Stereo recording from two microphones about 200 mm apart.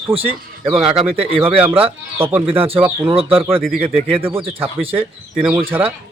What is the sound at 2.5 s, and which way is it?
Speech, 30° right (ahead or behind).